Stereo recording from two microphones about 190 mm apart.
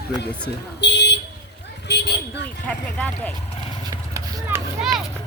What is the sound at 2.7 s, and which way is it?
Speech, 10° left (ahead or behind).